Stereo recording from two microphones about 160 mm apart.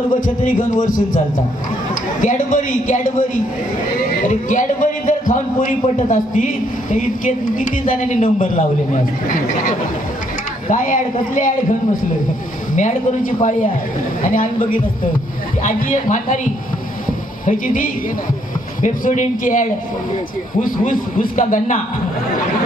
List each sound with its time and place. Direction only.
0.4 s a man's voice: 55° left (ahead or behind)
2.2 s a man's voice: 55° left (ahead or behind)
4.3 s a man's voice: 55° left (ahead or behind)
12.7 s a man's voice: 55° left (ahead or behind)
17.5 s a man's voice: 60° left (ahead or behind)